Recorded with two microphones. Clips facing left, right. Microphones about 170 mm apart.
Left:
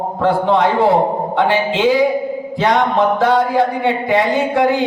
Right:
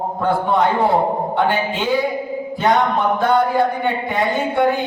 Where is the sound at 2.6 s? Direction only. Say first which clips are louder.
Left 2 dB; 90° left.